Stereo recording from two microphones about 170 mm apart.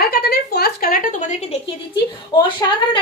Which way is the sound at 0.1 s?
70° left (ahead or behind).